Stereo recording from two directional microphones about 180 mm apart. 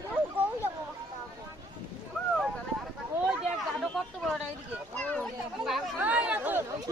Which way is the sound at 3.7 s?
Centre (ahead or behind).